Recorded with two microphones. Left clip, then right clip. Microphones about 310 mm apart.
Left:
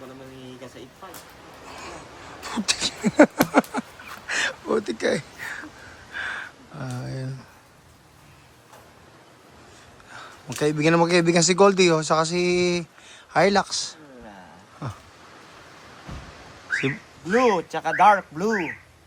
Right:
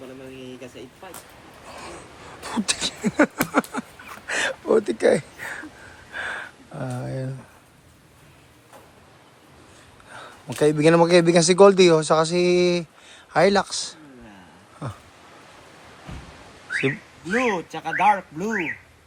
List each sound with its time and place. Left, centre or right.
1.7 s speech: centre
2.4 s a sound: centre
10.1 s a man's voice: centre
16.8 s speech: centre